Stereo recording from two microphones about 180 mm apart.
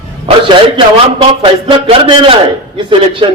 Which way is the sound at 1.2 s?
30° right (ahead or behind).